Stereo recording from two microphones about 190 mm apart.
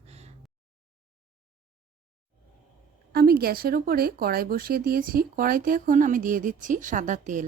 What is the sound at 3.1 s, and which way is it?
Speech, 55° right (ahead or behind).